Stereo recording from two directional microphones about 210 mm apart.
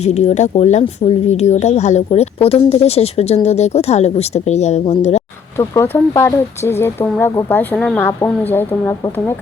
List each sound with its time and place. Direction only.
0.0 s speech: 30° left (ahead or behind)
5.5 s speech: 10° left (ahead or behind)